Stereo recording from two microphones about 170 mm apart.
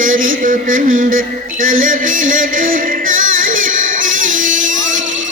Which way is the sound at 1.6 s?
55° right (ahead or behind).